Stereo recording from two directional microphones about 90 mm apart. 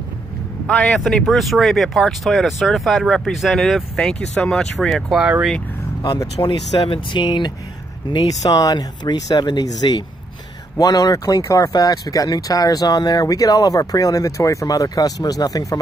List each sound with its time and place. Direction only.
0.7 s speech: 15° left (ahead or behind)
1.0 s speech: centre (ahead or behind)
6.4 s speech: 45° left (ahead or behind)
6.9 s speech: 60° left (ahead or behind)
8.4 s speech: 45° left (ahead or behind)